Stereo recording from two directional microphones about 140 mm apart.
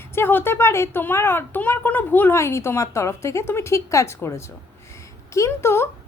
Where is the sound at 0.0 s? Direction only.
15° left (ahead or behind).